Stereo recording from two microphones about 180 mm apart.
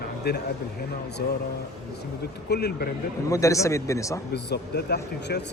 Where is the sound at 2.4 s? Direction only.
65° left (ahead or behind).